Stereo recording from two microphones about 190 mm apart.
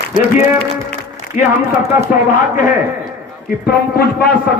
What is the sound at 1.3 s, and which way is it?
Speech, 40° left (ahead or behind).